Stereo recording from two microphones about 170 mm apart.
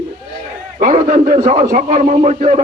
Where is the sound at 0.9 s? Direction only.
45° right (ahead or behind).